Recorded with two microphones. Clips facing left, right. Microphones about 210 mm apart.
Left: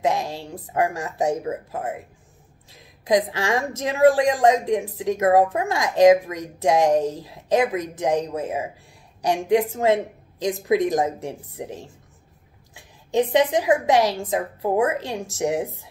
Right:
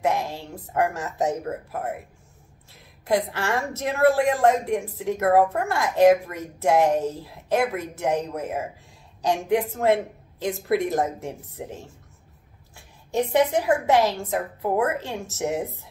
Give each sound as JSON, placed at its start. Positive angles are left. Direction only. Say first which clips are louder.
{"t": 0.0, "sound": "speech", "louder": "left 1 dB", "side_deg": 15}
{"t": 2.7, "sound": "speech", "louder": "left 3 dB", "side_deg": 15}
{"t": 13.3, "sound": "speech", "louder": "even", "side_deg": 15}